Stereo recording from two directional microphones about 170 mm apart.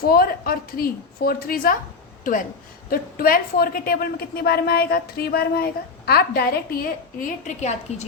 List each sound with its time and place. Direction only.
0.1 s a woman's voice: 60° left (ahead or behind); by 8.0 s 40° left (ahead or behind)